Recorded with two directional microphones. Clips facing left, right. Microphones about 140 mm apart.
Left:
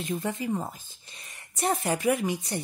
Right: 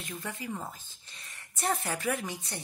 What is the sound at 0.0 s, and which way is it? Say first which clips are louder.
Speech: left 9 dB; 25° left (ahead or behind).